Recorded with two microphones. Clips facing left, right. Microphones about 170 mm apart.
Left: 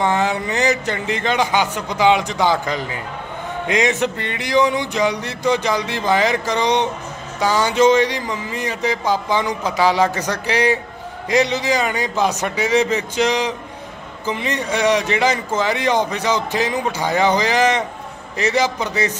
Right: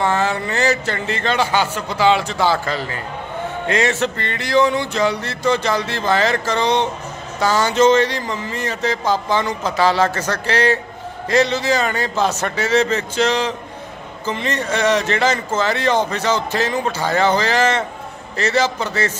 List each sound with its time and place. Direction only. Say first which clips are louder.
0.0 s speech: even; 15° left (ahead or behind)